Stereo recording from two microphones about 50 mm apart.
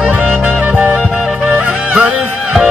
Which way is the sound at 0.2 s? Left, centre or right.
Right.